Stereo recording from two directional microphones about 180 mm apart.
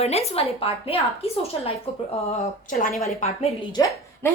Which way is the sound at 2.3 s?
45° left (ahead or behind).